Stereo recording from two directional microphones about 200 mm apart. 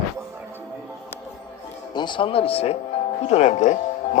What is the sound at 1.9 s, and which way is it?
A man's voice, 20° left (ahead or behind).